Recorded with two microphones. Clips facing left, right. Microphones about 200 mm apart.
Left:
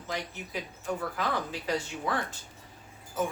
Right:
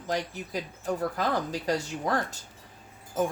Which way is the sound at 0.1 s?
40° right (ahead or behind).